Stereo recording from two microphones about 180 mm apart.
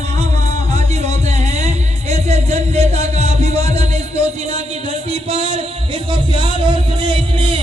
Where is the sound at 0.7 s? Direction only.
35° right (ahead or behind).